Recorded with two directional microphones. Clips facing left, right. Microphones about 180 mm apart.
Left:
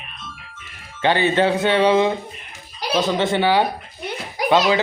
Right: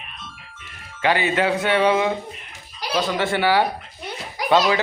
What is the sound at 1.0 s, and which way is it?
A man's voice, 30° left (ahead or behind).